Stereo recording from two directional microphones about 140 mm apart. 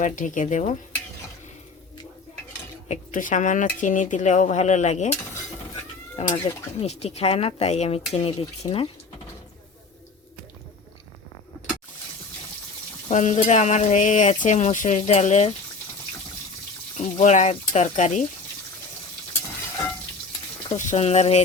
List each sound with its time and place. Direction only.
0.0 s stir: 65° left (ahead or behind)
2.9 s stir: 65° left (ahead or behind)
6.2 s speech: 45° left (ahead or behind)
13.1 s stir: 60° left (ahead or behind)
17.2 s stir: 55° left (ahead or behind)
20.7 s speech: 50° left (ahead or behind)